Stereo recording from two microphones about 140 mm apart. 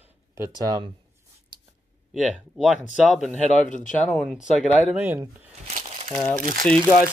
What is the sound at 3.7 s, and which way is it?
Speech, 65° left (ahead or behind).